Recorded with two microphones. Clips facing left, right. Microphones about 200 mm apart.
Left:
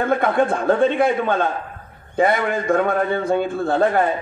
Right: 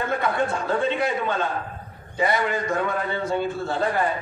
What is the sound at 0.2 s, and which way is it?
A man's voice, 55° left (ahead or behind).